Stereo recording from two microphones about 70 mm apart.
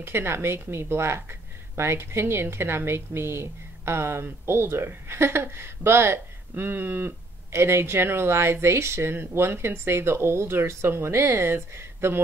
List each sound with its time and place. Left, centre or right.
0.0 s a woman's voice: right